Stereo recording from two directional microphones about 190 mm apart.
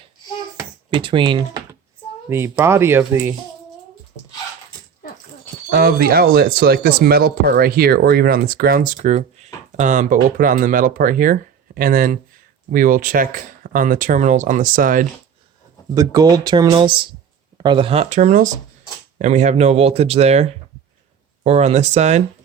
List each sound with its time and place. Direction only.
0.9 s speech: 25° right (ahead or behind)
5.7 s speech: 55° right (ahead or behind)
16.0 s speech: 20° right (ahead or behind); by 22.2 s 35° right (ahead or behind)